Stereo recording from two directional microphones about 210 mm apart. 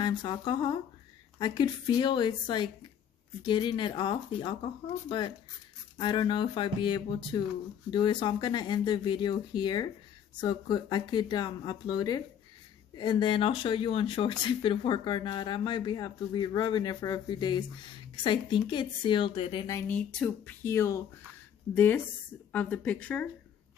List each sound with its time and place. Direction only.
0.0 s speech: 20° left (ahead or behind)
5.9 s speech: 20° left (ahead or behind)
19.9 s speech: 5° left (ahead or behind)